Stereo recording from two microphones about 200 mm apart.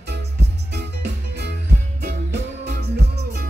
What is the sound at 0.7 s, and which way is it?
Music, 55° right (ahead or behind).